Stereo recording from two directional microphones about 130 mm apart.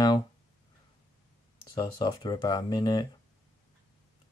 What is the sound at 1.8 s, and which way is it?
Speech, 35° left (ahead or behind).